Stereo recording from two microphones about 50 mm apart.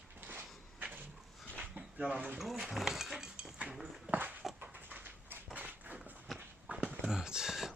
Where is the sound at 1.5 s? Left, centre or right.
Right.